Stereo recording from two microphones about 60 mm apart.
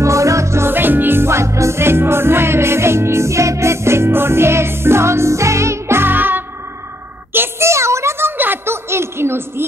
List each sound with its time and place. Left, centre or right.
0.0 s music: right
0.7 s music: right
7.3 s a sound: right